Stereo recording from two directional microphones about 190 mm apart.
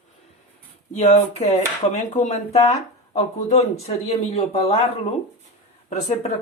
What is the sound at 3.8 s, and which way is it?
Speech, 30° left (ahead or behind).